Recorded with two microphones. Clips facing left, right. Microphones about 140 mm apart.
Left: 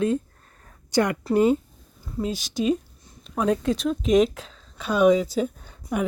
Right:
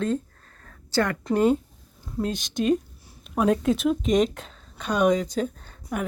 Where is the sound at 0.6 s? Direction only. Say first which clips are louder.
Left 2 dB; 15° left (ahead or behind).